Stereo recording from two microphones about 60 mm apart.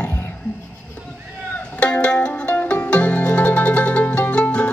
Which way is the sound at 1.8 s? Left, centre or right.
Centre.